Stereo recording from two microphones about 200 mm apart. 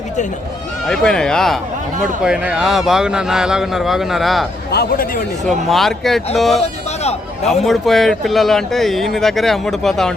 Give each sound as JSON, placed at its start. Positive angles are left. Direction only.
{"t": 0.9, "sound": "speech", "side_deg": 5}
{"t": 4.7, "sound": "a man's voice", "side_deg": 50}
{"t": 5.5, "sound": "speech", "side_deg": 0}
{"t": 6.6, "sound": "a sound", "side_deg": 30}
{"t": 7.6, "sound": "speech", "side_deg": 0}